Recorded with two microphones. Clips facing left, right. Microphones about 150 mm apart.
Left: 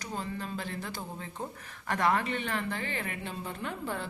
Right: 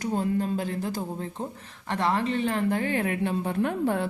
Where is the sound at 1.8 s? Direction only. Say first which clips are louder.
Right 3 dB; 25° right (ahead or behind).